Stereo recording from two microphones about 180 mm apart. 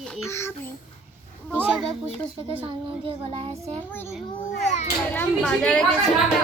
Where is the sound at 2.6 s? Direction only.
30° right (ahead or behind).